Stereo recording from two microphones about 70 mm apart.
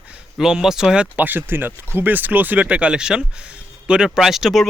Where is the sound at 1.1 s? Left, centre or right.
Right.